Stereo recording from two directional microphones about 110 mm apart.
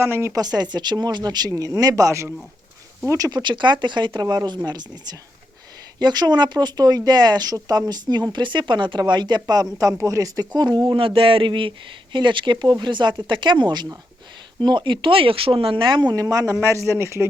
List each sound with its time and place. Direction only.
0.0 s speech: 25° right (ahead or behind)
0.4 s speech: 40° right (ahead or behind)
10.8 s speech: 50° right (ahead or behind); by 17.2 s 25° right (ahead or behind)